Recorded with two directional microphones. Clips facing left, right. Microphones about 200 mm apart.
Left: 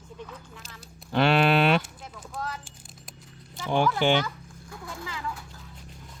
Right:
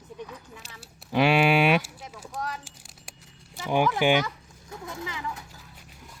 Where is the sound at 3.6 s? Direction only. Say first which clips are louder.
Right 1 dB; 15° right (ahead or behind).